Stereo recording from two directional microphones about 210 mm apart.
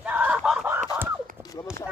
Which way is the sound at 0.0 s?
5° right (ahead or behind).